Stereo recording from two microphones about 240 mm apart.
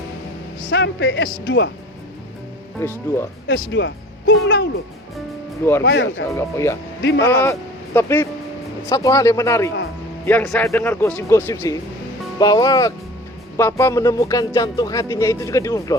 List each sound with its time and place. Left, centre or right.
0.7 s a man's voice: left
2.8 s speech: centre
3.4 s a man's voice: left
5.8 s a man's voice: left
6.3 s a man's voice: centre